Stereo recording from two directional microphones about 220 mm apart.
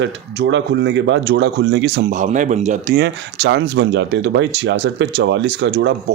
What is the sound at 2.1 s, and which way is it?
Speech, 35° right (ahead or behind).